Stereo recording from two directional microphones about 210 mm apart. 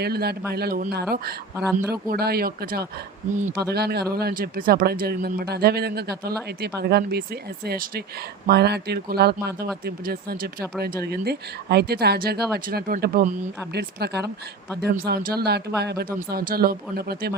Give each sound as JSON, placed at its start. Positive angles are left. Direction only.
{"t": 0.0, "sound": "speech", "side_deg": -50}